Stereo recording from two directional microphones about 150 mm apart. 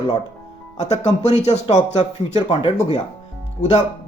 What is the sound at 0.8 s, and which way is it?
Speech, 45° left (ahead or behind).